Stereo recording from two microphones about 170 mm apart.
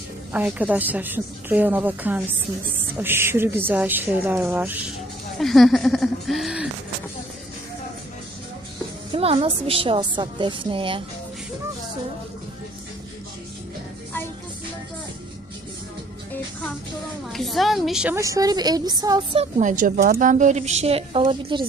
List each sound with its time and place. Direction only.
0.3 s speech: 10° right (ahead or behind)
5.4 s speech: centre (ahead or behind)
9.1 s a woman's voice: 35° right (ahead or behind)
17.3 s speech: centre (ahead or behind)
18.1 s a woman's voice: 20° right (ahead or behind)
19.4 s a woman's voice: 45° right (ahead or behind); by 21.6 s 30° right (ahead or behind)